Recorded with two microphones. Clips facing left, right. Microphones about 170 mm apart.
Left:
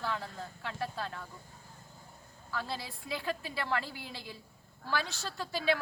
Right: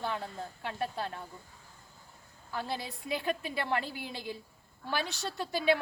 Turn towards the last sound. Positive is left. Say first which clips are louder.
# right 3 dB
turn(degrees=-20)  # may be behind; listen again after turning